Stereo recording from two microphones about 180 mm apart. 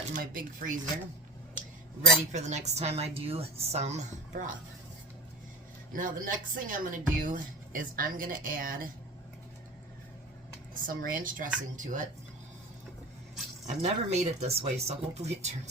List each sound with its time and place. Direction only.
0.1 s speech: 50° right (ahead or behind)
2.0 s speech: 40° right (ahead or behind)
5.9 s speech: 50° right (ahead or behind)
10.8 s speech: 50° right (ahead or behind)
13.7 s speech: 35° right (ahead or behind)